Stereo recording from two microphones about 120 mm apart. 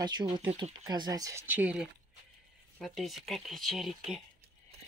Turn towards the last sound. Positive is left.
turn(degrees=0)  # may be behind; listen again after turning